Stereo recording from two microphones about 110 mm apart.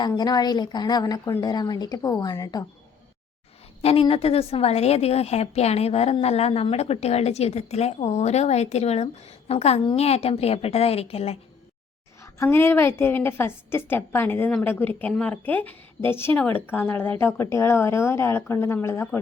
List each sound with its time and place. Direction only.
0.2 s a woman's voice: 40° left (ahead or behind)
4.1 s a woman's voice: 60° left (ahead or behind)
12.2 s a woman's voice: 25° left (ahead or behind)